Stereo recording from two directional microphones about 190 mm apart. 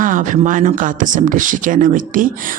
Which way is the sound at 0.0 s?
45° right (ahead or behind).